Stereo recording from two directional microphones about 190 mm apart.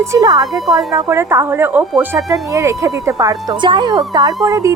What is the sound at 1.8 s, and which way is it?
Speech, centre (ahead or behind).